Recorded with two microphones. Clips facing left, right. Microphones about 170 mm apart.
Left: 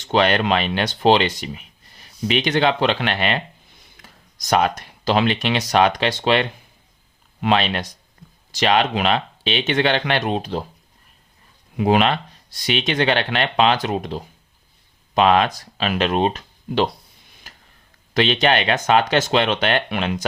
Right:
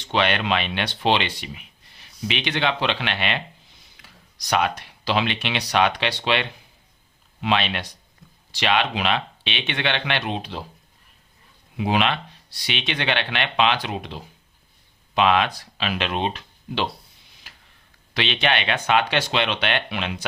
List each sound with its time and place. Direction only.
0.0 s speech: 40° left (ahead or behind)
11.8 s speech: 45° left (ahead or behind)
17.5 s tick-tock: 45° left (ahead or behind)
18.1 s speech: 45° left (ahead or behind)